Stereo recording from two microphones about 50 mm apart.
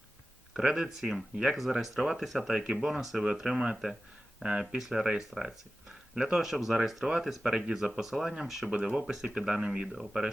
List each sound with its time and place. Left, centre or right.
0.5 s speech: centre
2.5 s speech: centre
3.0 s speech: centre
4.7 s speech: centre
6.4 s speech: centre
8.7 s speech: right
9.0 s speech: centre